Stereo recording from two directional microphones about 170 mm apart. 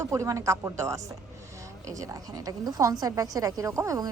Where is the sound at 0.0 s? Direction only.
15° right (ahead or behind).